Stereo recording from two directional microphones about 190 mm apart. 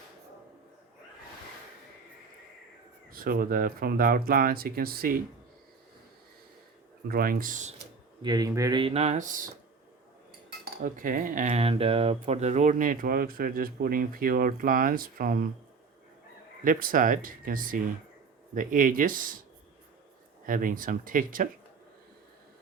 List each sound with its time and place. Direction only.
3.1 s speech: 50° right (ahead or behind)
7.1 s speech: 50° right (ahead or behind)
8.2 s speech: 20° right (ahead or behind); by 9.4 s 40° right (ahead or behind)
10.8 s speech: 45° right (ahead or behind)
16.6 s speech: 45° right (ahead or behind)
20.5 s speech: 45° right (ahead or behind)